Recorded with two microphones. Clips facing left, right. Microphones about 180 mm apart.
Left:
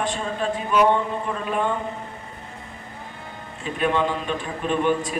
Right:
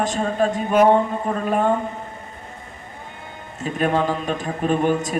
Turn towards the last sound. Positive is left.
turn(degrees=-40)  # may be behind; listen again after turning